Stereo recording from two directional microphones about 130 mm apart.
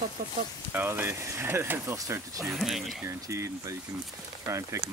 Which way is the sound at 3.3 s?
20° right (ahead or behind).